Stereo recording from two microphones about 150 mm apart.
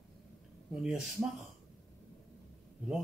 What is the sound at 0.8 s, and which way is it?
Speech, 5° right (ahead or behind).